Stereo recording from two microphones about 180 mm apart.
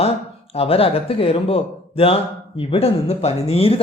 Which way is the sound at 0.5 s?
30° left (ahead or behind).